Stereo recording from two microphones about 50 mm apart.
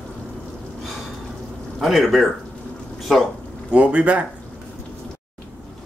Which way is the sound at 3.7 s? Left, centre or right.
Right.